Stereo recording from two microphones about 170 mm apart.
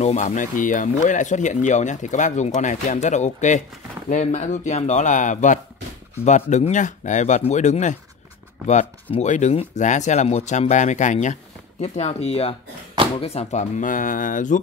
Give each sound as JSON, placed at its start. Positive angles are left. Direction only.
{"t": 0.0, "sound": "speech", "side_deg": 45}
{"t": 9.1, "sound": "speech", "side_deg": 45}